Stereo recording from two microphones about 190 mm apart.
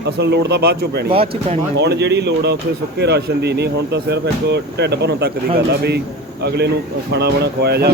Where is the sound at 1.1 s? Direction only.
30° right (ahead or behind).